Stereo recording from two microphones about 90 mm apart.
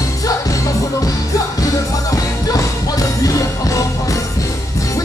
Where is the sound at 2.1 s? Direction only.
40° left (ahead or behind).